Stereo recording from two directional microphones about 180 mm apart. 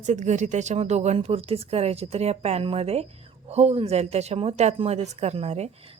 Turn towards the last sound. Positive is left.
turn(degrees=-35)  # may be behind; listen again after turning